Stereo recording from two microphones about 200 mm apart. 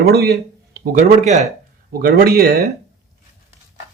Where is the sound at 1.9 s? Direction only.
50° right (ahead or behind).